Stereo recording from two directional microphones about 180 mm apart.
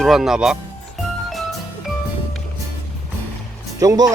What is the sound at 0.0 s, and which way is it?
Speech, centre (ahead or behind).